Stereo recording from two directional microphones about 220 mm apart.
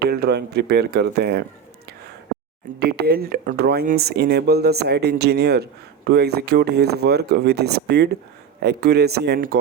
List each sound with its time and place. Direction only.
0.0 s speech: 45° right (ahead or behind)
2.7 s speech: 45° right (ahead or behind)